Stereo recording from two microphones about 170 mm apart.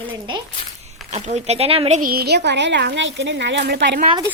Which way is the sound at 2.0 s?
65° right (ahead or behind).